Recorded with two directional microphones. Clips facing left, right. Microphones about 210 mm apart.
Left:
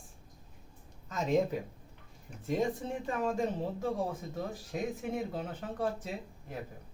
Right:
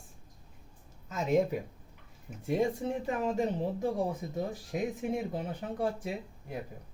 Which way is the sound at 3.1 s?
20° right (ahead or behind).